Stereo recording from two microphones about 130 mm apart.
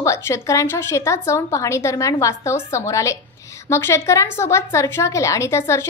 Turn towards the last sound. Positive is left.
turn(degrees=20)  # may be behind; listen again after turning